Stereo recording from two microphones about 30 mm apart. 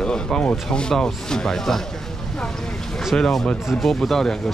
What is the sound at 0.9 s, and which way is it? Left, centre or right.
Speech, centre.